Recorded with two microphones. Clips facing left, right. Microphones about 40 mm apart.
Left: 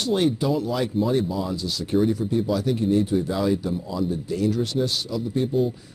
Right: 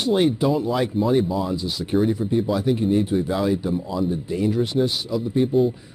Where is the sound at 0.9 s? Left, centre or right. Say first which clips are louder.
Right 3 dB; centre.